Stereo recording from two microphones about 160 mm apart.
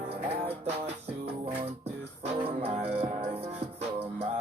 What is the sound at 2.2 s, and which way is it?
Music, 40° right (ahead or behind).